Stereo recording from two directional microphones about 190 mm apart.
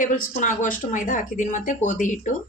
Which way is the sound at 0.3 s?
45° left (ahead or behind).